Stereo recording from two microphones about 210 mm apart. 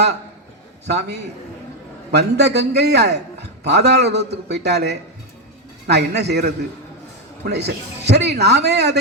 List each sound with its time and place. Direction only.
0.9 s a man's voice: 55° right (ahead or behind)